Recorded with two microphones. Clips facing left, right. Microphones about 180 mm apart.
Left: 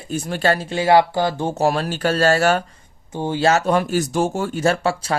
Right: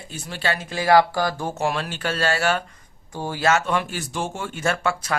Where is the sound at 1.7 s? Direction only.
40° left (ahead or behind).